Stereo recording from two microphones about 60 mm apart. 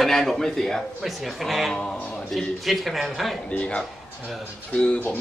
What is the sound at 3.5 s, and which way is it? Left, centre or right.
Speech, left.